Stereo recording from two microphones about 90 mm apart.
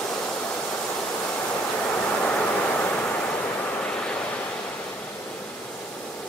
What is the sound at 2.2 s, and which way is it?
Vehicle, 15° left (ahead or behind).